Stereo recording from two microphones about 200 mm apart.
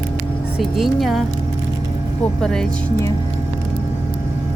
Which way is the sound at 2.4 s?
5° left (ahead or behind).